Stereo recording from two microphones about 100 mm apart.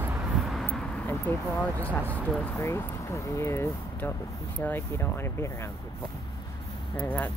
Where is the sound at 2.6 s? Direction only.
30° left (ahead or behind).